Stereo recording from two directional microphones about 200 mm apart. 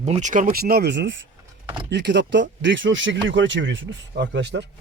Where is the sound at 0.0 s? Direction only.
35° right (ahead or behind).